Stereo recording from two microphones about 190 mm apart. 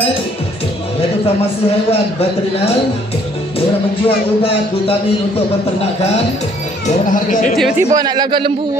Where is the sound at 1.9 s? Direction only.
30° left (ahead or behind).